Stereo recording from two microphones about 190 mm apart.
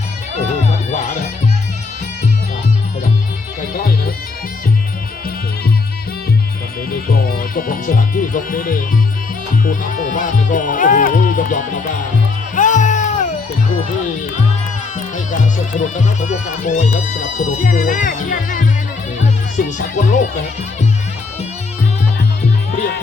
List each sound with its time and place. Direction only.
0.9 s music: 35° left (ahead or behind)
3.8 s music: 50° left (ahead or behind)
6.9 s speech: 50° left (ahead or behind)
12.5 s music: 40° left (ahead or behind)
14.9 s speech: 40° left (ahead or behind)